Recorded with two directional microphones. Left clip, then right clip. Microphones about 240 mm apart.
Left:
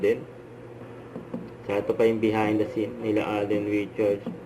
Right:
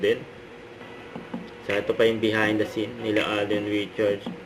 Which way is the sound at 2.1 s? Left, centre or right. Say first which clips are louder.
Right 1 dB; centre.